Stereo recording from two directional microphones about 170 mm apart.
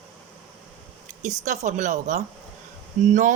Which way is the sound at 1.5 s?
45° right (ahead or behind).